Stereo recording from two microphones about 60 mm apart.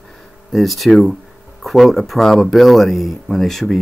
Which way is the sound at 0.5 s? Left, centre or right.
Centre.